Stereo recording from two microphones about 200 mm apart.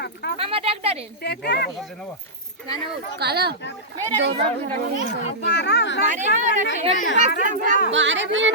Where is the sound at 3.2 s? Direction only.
55° right (ahead or behind).